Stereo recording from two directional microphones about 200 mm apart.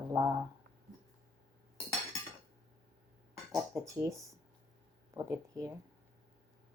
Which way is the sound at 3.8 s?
15° right (ahead or behind).